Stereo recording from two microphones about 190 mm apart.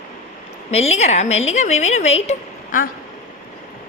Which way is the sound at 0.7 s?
35° left (ahead or behind).